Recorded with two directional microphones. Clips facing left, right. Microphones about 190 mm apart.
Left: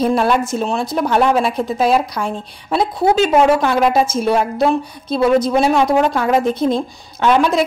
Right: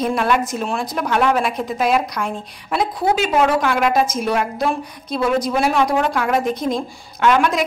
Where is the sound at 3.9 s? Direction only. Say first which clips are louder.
Left 3 dB; 30° left (ahead or behind).